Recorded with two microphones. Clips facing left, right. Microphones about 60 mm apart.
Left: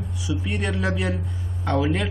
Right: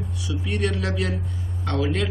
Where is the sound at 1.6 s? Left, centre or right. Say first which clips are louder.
Left 2 dB; centre.